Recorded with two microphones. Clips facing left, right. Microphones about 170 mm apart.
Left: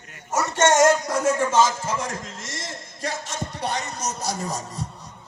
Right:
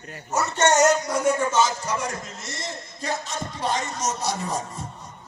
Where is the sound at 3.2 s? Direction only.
65° left (ahead or behind); by 4.8 s 40° left (ahead or behind).